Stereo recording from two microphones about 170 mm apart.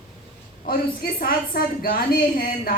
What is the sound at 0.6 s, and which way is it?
A woman's voice, 60° left (ahead or behind).